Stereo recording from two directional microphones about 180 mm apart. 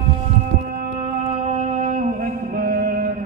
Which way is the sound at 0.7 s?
45° right (ahead or behind).